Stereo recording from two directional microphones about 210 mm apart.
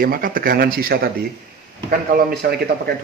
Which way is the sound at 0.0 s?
45° right (ahead or behind).